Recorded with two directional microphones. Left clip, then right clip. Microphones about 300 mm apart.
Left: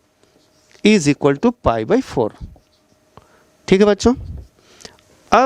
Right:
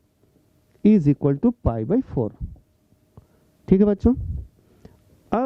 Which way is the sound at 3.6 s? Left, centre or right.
Centre.